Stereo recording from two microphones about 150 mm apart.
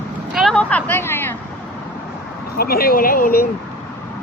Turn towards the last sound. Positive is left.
turn(degrees=75)  # may be behind; listen again after turning